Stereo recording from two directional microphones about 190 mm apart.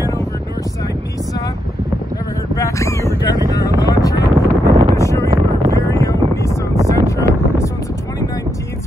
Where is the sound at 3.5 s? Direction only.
15° left (ahead or behind).